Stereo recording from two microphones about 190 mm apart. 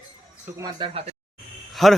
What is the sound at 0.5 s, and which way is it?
Speech, 20° right (ahead or behind).